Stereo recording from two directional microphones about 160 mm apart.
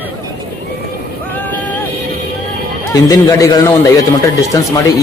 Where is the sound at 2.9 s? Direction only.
20° left (ahead or behind).